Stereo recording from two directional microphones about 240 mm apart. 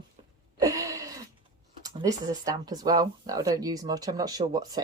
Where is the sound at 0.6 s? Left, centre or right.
Centre.